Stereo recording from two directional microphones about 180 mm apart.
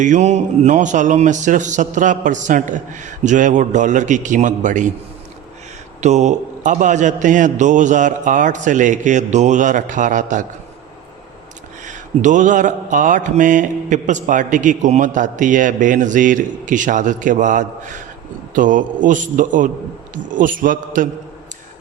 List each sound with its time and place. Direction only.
0.0 s mantra: 40° right (ahead or behind)
6.0 s mantra: 40° right (ahead or behind)
11.9 s mantra: 45° right (ahead or behind)